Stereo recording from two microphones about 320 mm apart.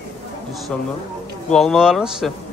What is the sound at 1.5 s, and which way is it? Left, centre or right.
Speech, centre.